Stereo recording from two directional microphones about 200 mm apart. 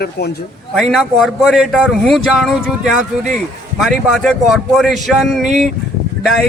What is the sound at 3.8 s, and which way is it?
Speech, centre (ahead or behind).